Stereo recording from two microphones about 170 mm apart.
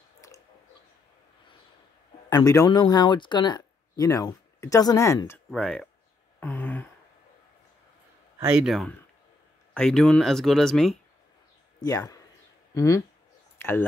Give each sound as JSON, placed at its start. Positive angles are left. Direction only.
{"t": 2.2, "sound": "speech", "side_deg": 20}
{"t": 5.5, "sound": "speech", "side_deg": 5}
{"t": 6.4, "sound": "a sound", "side_deg": 10}
{"t": 8.5, "sound": "speech", "side_deg": 0}
{"t": 11.8, "sound": "speech", "side_deg": 20}
{"t": 13.6, "sound": "a sound", "side_deg": 15}